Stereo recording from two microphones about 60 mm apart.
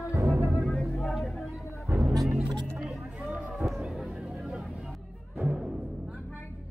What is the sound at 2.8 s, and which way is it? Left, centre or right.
Chatter, centre.